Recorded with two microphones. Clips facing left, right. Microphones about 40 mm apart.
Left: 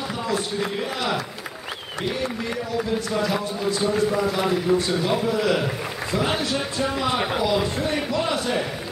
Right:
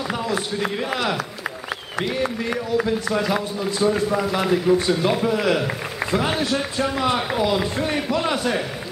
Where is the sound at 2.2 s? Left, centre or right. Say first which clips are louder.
Right 3 dB; right.